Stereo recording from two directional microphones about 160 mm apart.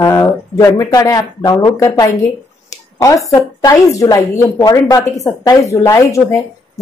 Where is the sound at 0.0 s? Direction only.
20° left (ahead or behind).